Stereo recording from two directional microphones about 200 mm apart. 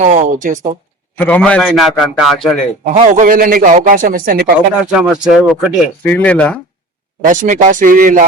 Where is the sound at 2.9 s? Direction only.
40° right (ahead or behind).